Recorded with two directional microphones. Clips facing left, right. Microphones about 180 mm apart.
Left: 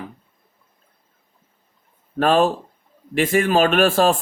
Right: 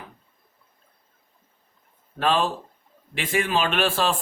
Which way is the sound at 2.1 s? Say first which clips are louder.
Left 6 dB; 45° left (ahead or behind).